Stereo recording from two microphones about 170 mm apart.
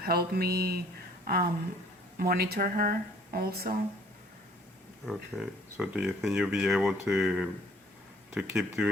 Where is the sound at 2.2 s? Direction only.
65° right (ahead or behind).